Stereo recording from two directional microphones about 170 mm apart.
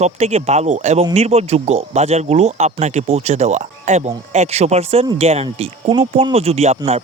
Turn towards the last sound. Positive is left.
turn(degrees=-35)  # may be behind; listen again after turning